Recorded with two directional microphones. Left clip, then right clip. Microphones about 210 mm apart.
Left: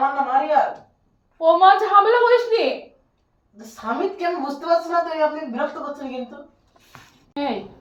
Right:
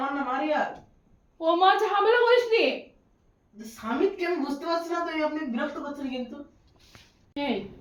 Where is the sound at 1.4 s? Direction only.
40° right (ahead or behind).